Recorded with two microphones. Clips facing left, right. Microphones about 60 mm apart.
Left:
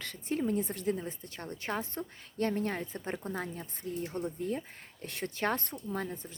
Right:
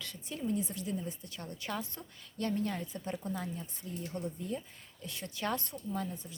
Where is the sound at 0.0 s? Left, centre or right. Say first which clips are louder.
Left 6 dB; left.